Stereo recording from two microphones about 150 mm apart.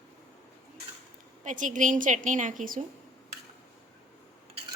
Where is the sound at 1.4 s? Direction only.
55° right (ahead or behind).